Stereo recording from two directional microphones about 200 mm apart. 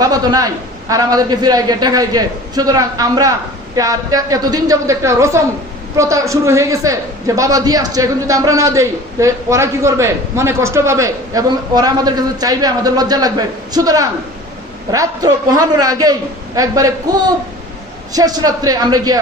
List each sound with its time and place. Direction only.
0.0 s a man's voice: 20° right (ahead or behind)